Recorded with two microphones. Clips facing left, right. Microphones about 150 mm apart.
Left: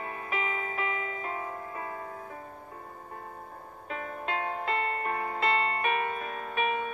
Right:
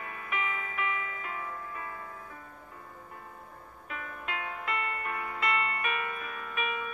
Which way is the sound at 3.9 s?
35° left (ahead or behind).